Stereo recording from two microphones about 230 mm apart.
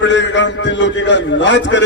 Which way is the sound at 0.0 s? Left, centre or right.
Left.